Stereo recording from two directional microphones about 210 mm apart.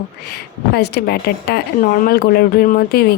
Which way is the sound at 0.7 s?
50° left (ahead or behind).